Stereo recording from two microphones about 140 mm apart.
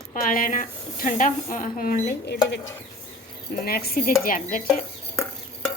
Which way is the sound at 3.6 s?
90° left.